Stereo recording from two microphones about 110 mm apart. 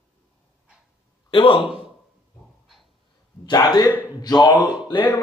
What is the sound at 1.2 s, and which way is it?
Speech, 50° left (ahead or behind).